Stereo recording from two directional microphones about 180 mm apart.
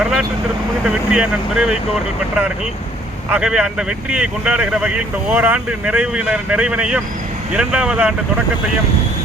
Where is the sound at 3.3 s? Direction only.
5° right (ahead or behind).